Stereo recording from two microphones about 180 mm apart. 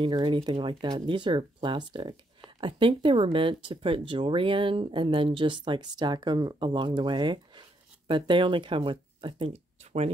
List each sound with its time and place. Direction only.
0.0 s speech: 25° right (ahead or behind)